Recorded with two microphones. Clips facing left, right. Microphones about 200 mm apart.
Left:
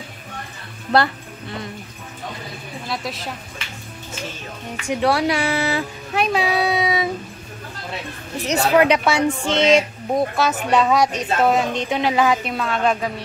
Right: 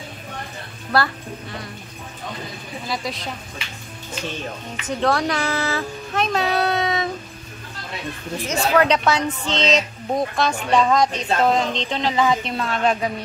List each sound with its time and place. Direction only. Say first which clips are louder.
0.9 s a woman's voice: left 3 dB; 25° left (ahead or behind)
2.9 s a woman's voice: even; centre (ahead or behind)
4.8 s speech: left 2 dB; 10° left (ahead or behind)
8.5 s a woman's voice: left 2 dB; 15° left (ahead or behind)